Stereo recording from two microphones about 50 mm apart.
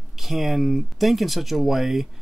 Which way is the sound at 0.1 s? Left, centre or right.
Centre.